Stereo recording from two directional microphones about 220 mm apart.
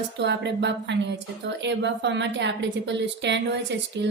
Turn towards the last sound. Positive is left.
turn(degrees=-55)  # may be behind; listen again after turning